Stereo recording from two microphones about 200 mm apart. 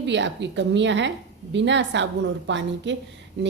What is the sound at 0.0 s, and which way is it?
A woman's voice, 60° right (ahead or behind).